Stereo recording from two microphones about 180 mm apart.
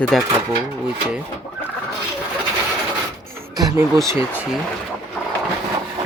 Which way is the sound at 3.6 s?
20° right (ahead or behind).